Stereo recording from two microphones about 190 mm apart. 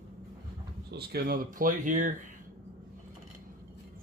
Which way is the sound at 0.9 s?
55° right (ahead or behind).